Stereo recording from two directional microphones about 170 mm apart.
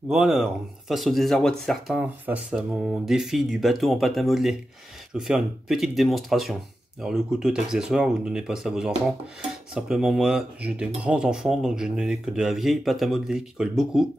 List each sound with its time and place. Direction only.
0.1 s speech: centre (ahead or behind)